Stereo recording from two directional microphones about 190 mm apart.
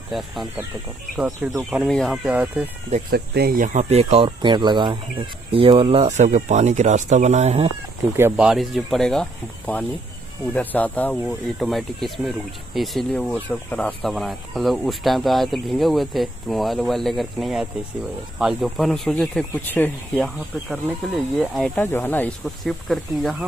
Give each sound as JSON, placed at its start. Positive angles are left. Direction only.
{"t": 0.1, "sound": "speech", "side_deg": 0}
{"t": 3.1, "sound": "speech", "side_deg": -55}
{"t": 3.6, "sound": "speech", "side_deg": -35}
{"t": 8.2, "sound": "speech", "side_deg": -10}